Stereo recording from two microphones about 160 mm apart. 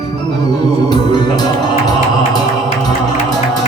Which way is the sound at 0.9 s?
25° left (ahead or behind).